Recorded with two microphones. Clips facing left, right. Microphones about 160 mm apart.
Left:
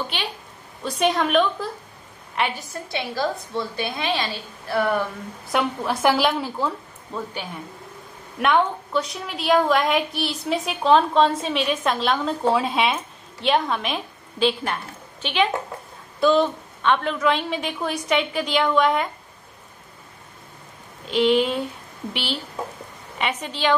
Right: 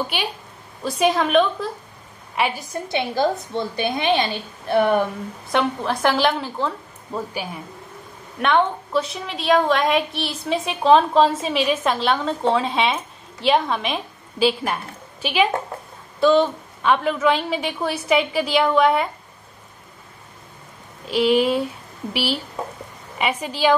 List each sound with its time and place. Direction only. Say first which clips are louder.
0.1 s a woman's voice: right 3 dB; 10° right (ahead or behind)
5.5 s a woman's voice: right 2 dB; 5° left (ahead or behind)
8.4 s a woman's voice: right 1 dB; centre (ahead or behind)
21.1 s a woman's voice: right 2 dB; 5° right (ahead or behind)